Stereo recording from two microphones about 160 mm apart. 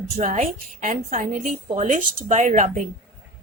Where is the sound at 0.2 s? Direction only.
50° right (ahead or behind).